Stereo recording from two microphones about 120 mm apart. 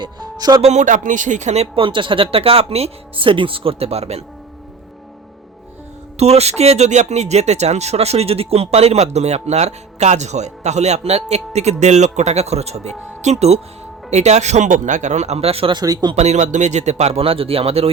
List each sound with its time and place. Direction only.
0.0 s speech: 35° right (ahead or behind)
0.6 s speech: 80° right
1.7 s speech: 45° right (ahead or behind)
6.1 s speech: 60° right (ahead or behind)
15.7 s speech: 35° right (ahead or behind)
16.1 s speech: 70° right (ahead or behind)